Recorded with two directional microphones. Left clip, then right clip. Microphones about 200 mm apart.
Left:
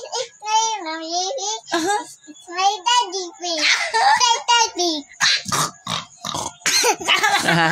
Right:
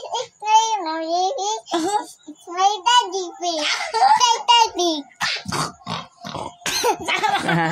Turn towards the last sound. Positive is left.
turn(degrees=45)  # may be behind; listen again after turning